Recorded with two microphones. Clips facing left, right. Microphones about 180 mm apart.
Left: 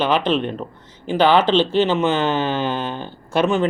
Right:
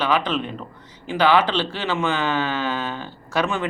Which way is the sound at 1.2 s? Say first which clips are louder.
Left 3 dB; 25° left (ahead or behind).